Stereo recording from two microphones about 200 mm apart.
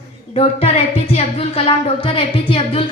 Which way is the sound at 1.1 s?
30° left (ahead or behind).